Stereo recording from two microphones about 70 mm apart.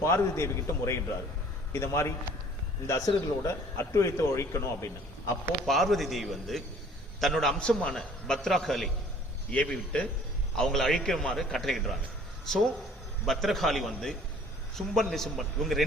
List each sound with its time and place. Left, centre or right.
0.0 s a man's voice: left
5.6 s a man's voice: centre
10.6 s a man's voice: centre
13.2 s a man's voice: centre